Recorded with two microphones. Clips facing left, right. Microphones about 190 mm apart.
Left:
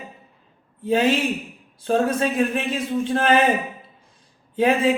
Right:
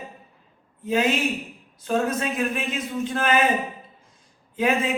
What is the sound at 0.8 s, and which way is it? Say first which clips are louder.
A woman's voice: left 3 dB; 30° left (ahead or behind).